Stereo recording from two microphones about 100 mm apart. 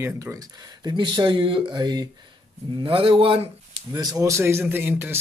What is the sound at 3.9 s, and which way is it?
Speech, 40° right (ahead or behind).